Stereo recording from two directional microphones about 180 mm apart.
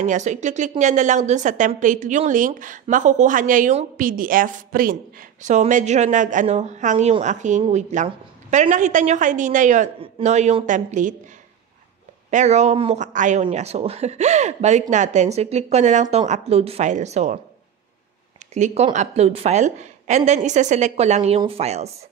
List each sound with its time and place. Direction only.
0.0 s a woman's voice: 40° right (ahead or behind)
9.9 s speech: 35° right (ahead or behind)
12.3 s speech: 40° right (ahead or behind)
18.5 s speech: 40° right (ahead or behind)